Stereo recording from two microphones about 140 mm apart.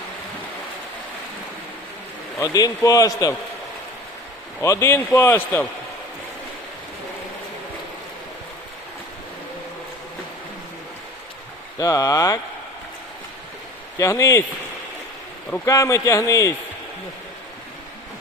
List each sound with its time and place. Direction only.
2.4 s a man's voice: 25° left (ahead or behind)
4.6 s a man's voice: 20° left (ahead or behind)
11.8 s a man's voice: 25° left (ahead or behind)
14.0 s a man's voice: 20° left (ahead or behind)
15.6 s a man's voice: 25° left (ahead or behind)